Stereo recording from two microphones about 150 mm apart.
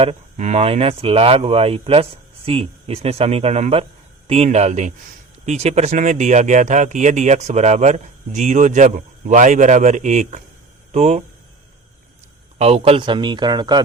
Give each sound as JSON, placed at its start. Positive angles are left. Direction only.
{"t": 0.0, "sound": "speech", "side_deg": -45}
{"t": 12.5, "sound": "speech", "side_deg": -45}